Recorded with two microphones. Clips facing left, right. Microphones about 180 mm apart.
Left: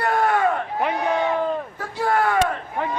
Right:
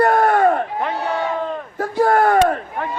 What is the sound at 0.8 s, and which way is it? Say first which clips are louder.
Speech: even; 15° left (ahead or behind).